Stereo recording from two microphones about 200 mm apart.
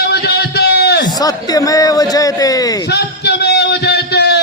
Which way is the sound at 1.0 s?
20° left (ahead or behind).